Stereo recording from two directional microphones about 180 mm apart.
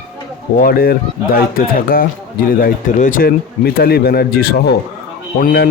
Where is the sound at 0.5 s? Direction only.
55° left (ahead or behind).